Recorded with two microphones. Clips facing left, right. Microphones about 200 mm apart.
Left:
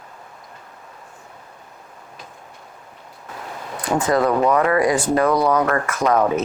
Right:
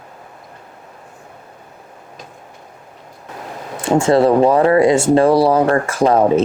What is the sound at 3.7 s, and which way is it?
Speech, 25° right (ahead or behind).